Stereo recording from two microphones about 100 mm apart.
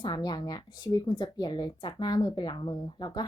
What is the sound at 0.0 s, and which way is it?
Speech, 50° left (ahead or behind).